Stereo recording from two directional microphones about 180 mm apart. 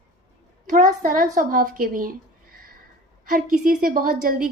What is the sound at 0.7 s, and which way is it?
A woman's voice, 45° right (ahead or behind).